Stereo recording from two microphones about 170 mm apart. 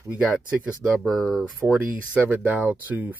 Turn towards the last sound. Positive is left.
turn(degrees=-10)  # may be behind; listen again after turning